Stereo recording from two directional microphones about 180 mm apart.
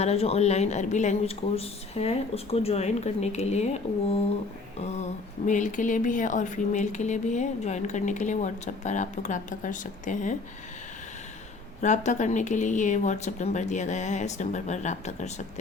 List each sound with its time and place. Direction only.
0.0 s a woman's voice: 35° left (ahead or behind)
4.8 s a woman's voice: 40° left (ahead or behind)
11.8 s a woman's voice: 40° left (ahead or behind)